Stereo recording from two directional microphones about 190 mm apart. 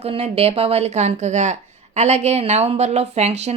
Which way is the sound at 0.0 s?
30° right (ahead or behind).